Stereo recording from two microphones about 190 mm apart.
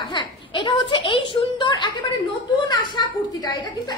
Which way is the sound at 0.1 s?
25° left (ahead or behind).